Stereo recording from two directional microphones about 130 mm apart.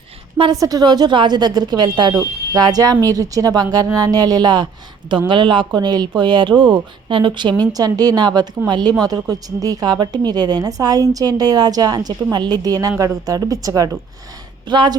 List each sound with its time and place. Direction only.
0.5 s speech: 25° right (ahead or behind)